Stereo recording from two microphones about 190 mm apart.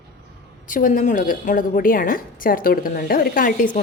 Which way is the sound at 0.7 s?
45° left (ahead or behind).